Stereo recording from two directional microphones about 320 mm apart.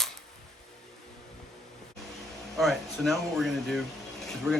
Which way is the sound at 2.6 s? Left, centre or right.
Centre.